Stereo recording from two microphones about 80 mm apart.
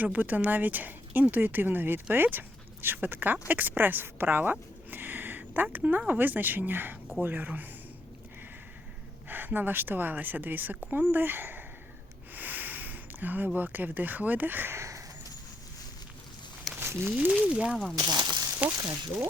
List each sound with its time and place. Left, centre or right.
0.0 s speech: right
4.9 s a sound: right
6.0 s speech: right
9.3 s speech: right
14.8 s a sound: right
16.8 s speech: right
17.9 s zipper: right